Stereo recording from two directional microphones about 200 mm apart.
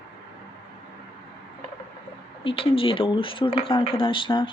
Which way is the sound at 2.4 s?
25° left (ahead or behind).